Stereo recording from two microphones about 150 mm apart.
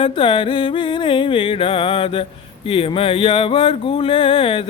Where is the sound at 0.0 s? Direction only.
35° left (ahead or behind).